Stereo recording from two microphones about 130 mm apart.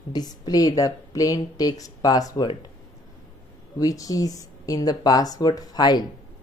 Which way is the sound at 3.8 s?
25° left (ahead or behind).